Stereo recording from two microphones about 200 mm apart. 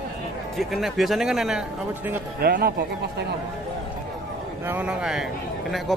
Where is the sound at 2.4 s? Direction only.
50° right (ahead or behind).